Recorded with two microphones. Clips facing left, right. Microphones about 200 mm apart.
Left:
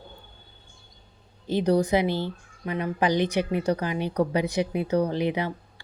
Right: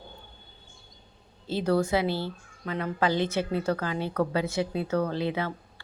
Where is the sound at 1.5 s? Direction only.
15° left (ahead or behind).